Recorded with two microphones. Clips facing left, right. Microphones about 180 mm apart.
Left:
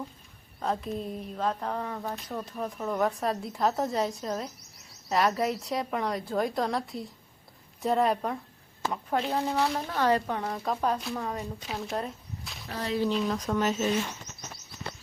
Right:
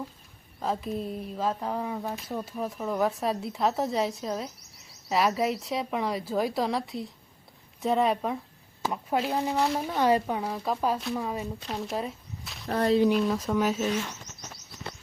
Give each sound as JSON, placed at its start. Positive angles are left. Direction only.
{"t": 0.6, "sound": "speech", "side_deg": 0}
{"t": 12.6, "sound": "speech", "side_deg": -50}
{"t": 13.0, "sound": "speech", "side_deg": -10}